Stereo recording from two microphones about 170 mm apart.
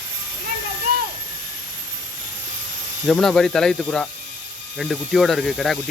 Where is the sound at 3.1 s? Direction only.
5° left (ahead or behind).